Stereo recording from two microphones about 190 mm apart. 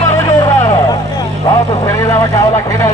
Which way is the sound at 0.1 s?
15° left (ahead or behind).